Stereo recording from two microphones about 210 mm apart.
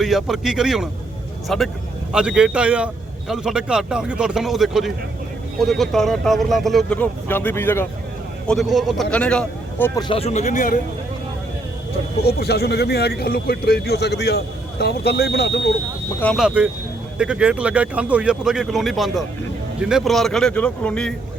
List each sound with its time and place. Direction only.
0.0 s a man's voice: centre (ahead or behind)
8.4 s a man's voice: centre (ahead or behind)
10.0 s speech: 25° left (ahead or behind)
12.2 s a man's voice: 50° left (ahead or behind)
16.2 s a man's voice: 5° left (ahead or behind)